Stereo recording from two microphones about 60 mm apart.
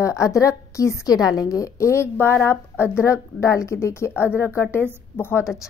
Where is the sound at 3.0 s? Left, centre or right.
Left.